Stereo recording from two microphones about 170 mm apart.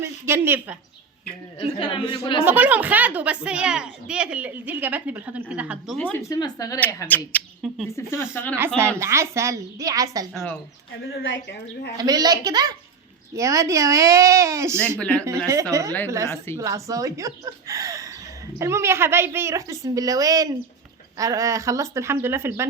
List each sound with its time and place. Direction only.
0.0 s a woman's voice: 15° right (ahead or behind)
1.8 s speech: 30° left (ahead or behind)
2.4 s a woman's voice: 10° right (ahead or behind)
6.0 s speech: 10° left (ahead or behind)
6.7 s speech: 10° left (ahead or behind)
8.5 s a woman's voice: 15° right (ahead or behind)
11.2 s a woman's voice: 90° left
11.9 s speech: 25° right (ahead or behind)
14.8 s speech: 5° left (ahead or behind)
15.7 s a woman's voice: 20° right (ahead or behind)